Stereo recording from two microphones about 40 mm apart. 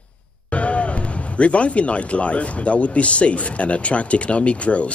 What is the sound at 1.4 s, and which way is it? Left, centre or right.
A man's voice, left.